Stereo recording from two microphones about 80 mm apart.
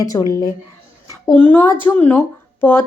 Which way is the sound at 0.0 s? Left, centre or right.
Left.